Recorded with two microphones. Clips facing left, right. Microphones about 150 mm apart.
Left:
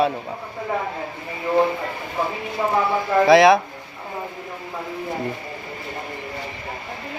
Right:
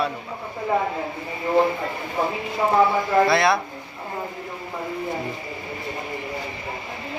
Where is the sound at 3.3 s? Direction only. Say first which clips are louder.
Left 7 dB; 90° left.